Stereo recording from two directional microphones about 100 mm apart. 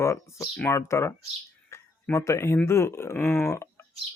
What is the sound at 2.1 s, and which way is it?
Speech, 30° left (ahead or behind).